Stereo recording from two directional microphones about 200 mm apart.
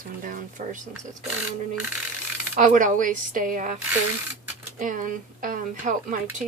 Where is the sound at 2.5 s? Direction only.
40° right (ahead or behind).